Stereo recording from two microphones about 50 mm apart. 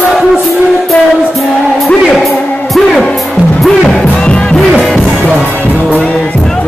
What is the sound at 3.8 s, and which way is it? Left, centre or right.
Music, centre.